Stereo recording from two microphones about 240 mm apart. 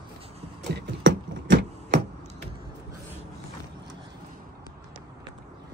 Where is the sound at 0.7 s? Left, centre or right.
Right.